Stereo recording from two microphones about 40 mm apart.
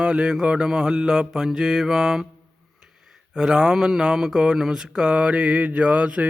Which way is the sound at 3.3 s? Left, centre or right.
Centre.